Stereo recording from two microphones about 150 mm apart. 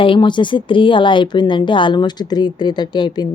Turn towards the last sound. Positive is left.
turn(degrees=30)  # may be behind; listen again after turning